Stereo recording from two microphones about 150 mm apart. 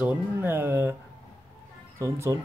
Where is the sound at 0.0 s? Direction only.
10° right (ahead or behind).